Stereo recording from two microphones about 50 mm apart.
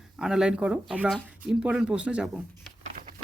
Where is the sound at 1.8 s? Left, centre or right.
Right.